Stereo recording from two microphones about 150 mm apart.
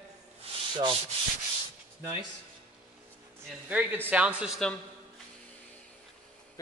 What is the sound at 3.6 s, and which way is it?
Speech, 10° right (ahead or behind).